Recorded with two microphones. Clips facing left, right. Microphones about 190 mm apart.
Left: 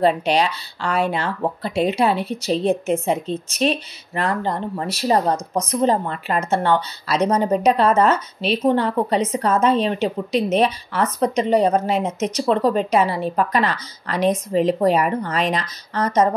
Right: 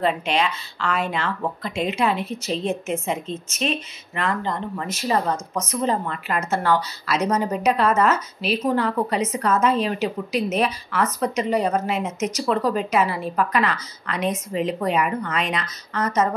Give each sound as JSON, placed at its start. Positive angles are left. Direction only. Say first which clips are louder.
{"t": 0.0, "sound": "speech", "louder": "left 4 dB", "side_deg": 35}